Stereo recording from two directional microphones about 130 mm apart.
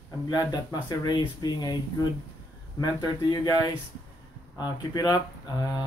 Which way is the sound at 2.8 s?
30° left (ahead or behind).